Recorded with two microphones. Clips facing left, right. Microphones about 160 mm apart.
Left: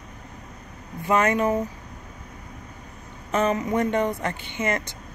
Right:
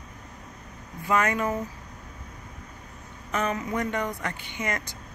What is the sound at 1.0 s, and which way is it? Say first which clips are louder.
Speech: left 4 dB; 25° left (ahead or behind).